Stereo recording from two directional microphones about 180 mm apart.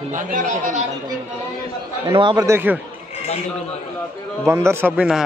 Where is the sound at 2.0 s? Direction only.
25° right (ahead or behind).